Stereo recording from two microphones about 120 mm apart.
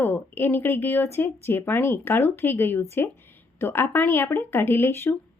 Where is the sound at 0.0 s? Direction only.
20° left (ahead or behind).